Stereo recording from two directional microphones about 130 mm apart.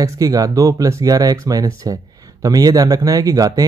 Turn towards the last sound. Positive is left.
turn(degrees=-30)  # may be behind; listen again after turning